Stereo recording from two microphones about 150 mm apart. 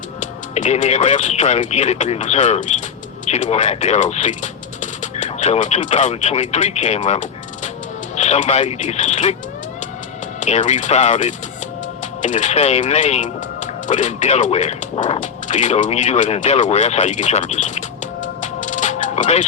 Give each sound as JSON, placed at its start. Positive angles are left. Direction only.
{"t": 0.2, "sound": "speech", "side_deg": 50}
{"t": 10.4, "sound": "speech", "side_deg": 50}
{"t": 15.2, "sound": "music", "side_deg": 55}